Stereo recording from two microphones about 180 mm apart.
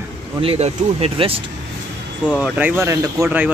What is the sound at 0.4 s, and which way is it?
Speech, 35° right (ahead or behind).